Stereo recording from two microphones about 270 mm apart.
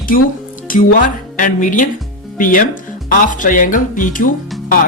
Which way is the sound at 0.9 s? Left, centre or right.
Left.